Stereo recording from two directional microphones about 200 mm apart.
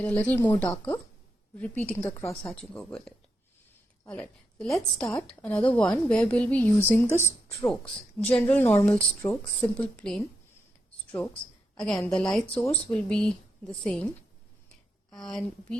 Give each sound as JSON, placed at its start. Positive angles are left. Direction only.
{"t": 0.0, "sound": "a woman's voice", "side_deg": 5}
{"t": 4.1, "sound": "a woman's voice", "side_deg": 5}
{"t": 11.7, "sound": "speech", "side_deg": 0}
{"t": 15.1, "sound": "speech", "side_deg": 0}